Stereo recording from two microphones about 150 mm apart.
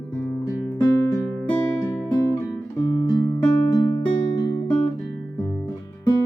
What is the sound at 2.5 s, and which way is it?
Music, 25° left (ahead or behind).